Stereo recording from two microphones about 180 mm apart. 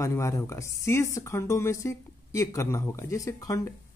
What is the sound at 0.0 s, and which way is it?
Speech, 15° left (ahead or behind).